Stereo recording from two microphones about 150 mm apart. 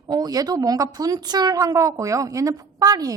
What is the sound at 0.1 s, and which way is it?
A woman's voice, 25° right (ahead or behind).